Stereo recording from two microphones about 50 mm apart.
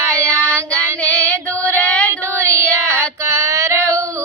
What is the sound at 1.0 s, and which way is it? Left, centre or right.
Female singing, left.